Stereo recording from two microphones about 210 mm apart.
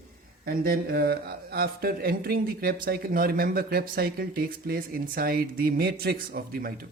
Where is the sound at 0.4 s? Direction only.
45° right (ahead or behind).